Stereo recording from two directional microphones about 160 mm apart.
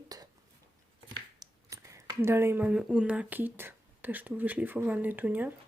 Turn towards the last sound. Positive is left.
turn(degrees=-10)  # may be behind; listen again after turning